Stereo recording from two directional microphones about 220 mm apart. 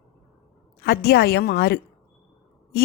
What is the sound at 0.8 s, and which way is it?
Speech, 45° left (ahead or behind).